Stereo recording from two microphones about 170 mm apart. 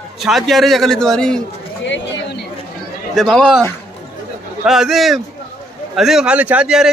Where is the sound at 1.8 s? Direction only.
90° left.